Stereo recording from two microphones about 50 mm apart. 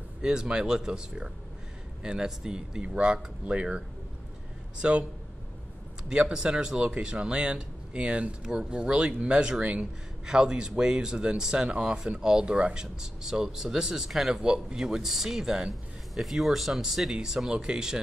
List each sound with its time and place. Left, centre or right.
0.2 s speech: centre
6.0 s speech: centre